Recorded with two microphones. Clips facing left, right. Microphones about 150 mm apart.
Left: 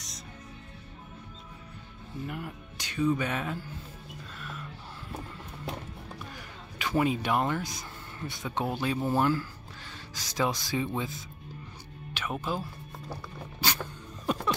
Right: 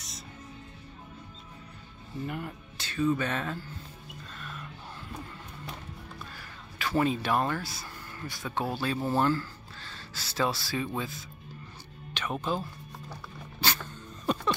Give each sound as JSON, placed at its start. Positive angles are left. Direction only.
{"t": 2.2, "sound": "speech", "side_deg": 0}
{"t": 2.8, "sound": "music", "side_deg": 15}
{"t": 6.3, "sound": "speech", "side_deg": 15}
{"t": 12.1, "sound": "speech", "side_deg": 10}
{"t": 13.6, "sound": "music", "side_deg": 10}